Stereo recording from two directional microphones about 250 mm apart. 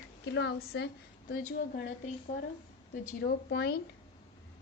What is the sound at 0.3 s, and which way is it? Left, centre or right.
Speech, left.